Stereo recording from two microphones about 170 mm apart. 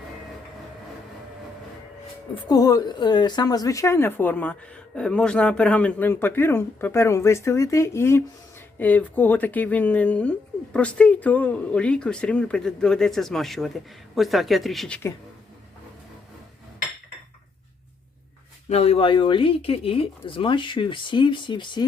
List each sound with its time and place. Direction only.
2.3 s a woman's voice: 20° left (ahead or behind); by 15.1 s 5° left (ahead or behind)
18.7 s speech: 35° left (ahead or behind)